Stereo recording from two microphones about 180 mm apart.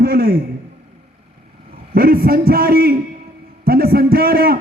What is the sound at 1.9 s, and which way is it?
A man's voice, 55° right (ahead or behind).